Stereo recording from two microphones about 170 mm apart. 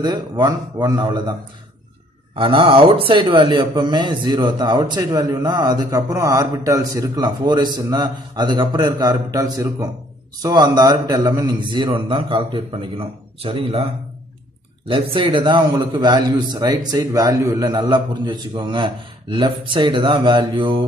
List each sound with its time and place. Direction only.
0.0 s a man's voice: 25° right (ahead or behind)
2.3 s a man's voice: 30° right (ahead or behind)
14.9 s a man's voice: 30° right (ahead or behind)